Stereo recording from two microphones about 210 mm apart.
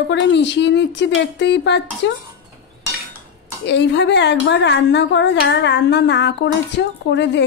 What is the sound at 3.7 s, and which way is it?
A woman's voice, 55° left (ahead or behind).